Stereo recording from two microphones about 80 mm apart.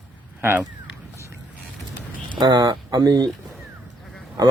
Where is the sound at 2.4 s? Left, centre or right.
Right.